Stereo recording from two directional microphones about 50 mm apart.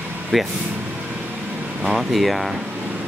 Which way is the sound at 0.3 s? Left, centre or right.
Centre.